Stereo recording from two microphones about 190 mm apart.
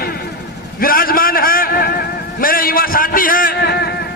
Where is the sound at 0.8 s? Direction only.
50° left (ahead or behind).